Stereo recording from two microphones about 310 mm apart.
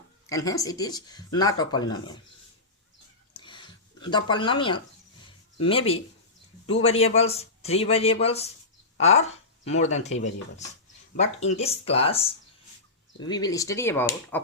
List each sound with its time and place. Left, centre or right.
0.3 s speech: centre
3.3 s a sound: centre
4.1 s a man's voice: centre
11.2 s a man's voice: left